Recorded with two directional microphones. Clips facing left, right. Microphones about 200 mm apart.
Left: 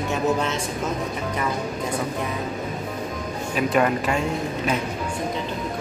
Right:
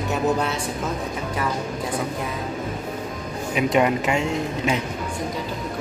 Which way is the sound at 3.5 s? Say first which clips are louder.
Right 1 dB; 20° right (ahead or behind).